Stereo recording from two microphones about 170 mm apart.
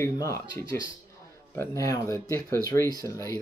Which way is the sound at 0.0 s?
15° left (ahead or behind).